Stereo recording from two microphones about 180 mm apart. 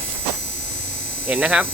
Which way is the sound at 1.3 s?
10° right (ahead or behind).